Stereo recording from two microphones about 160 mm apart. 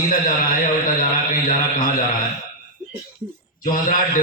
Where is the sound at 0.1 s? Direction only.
60° left (ahead or behind).